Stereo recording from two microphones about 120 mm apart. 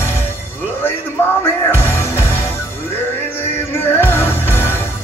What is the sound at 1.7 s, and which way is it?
Music, 20° left (ahead or behind).